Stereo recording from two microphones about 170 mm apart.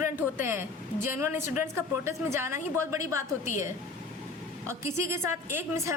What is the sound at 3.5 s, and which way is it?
Speech, 50° left (ahead or behind).